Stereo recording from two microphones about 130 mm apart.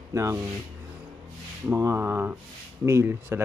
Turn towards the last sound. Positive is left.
turn(degrees=-20)  # may be behind; listen again after turning